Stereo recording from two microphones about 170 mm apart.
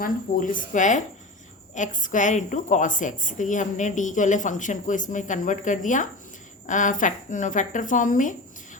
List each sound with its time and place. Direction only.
0.0 s a woman's voice: 50° left (ahead or behind)